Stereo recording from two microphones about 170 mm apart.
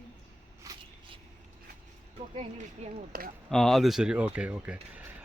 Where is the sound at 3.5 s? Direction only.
Centre (ahead or behind).